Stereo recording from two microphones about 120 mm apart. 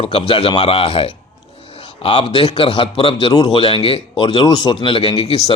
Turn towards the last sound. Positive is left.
turn(degrees=55)  # may be behind; listen again after turning